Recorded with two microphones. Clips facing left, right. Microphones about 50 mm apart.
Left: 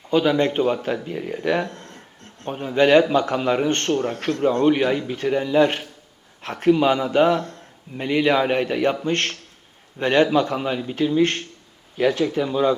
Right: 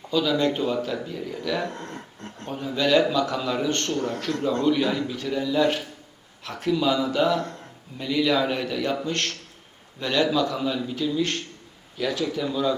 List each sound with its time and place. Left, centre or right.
0.1 s a man's voice: left